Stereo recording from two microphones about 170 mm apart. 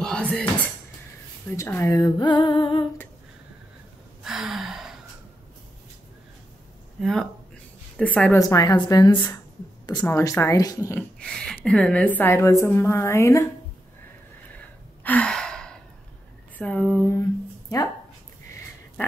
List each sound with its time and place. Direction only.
0.0 s a sound: 5° left (ahead or behind)
1.6 s speech: 15° left (ahead or behind)
4.2 s gasp: centre (ahead or behind)
7.0 s speech: centre (ahead or behind)
8.4 s speech: 20° left (ahead or behind)
15.0 s gasp: 5° left (ahead or behind)
16.5 s speech: 5° left (ahead or behind)
19.0 s pig: 10° left (ahead or behind)